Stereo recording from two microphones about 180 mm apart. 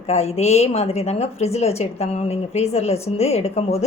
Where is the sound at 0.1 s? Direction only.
35° left (ahead or behind).